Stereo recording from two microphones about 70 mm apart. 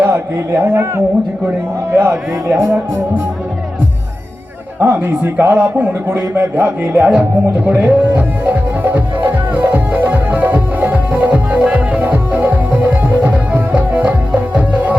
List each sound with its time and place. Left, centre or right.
0.0 s a man's voice: right
4.8 s a man's voice: right
7.6 s music: right